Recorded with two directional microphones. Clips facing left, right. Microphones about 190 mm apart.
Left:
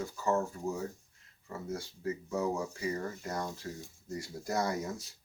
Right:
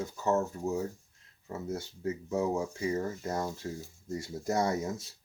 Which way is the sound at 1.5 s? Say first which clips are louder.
Right 3 dB; 20° right (ahead or behind).